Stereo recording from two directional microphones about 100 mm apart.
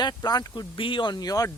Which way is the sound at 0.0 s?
40° left (ahead or behind).